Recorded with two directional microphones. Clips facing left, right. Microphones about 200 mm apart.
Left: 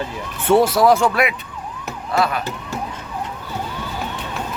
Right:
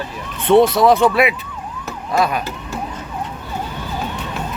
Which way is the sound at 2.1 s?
20° right (ahead or behind).